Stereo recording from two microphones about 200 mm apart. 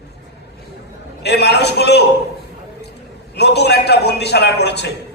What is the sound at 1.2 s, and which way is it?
Speech, 55° left (ahead or behind).